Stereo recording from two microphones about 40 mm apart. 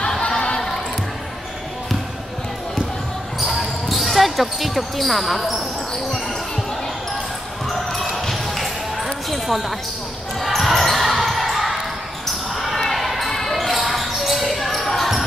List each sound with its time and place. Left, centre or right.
0.2 s a sound: left
3.3 s basketball bounce: centre
7.7 s basketball bounce: centre